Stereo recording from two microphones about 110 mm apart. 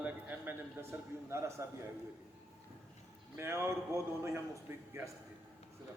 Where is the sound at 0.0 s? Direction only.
15° right (ahead or behind).